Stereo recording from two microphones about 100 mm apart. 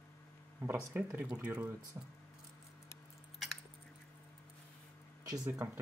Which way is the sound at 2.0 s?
25° right (ahead or behind).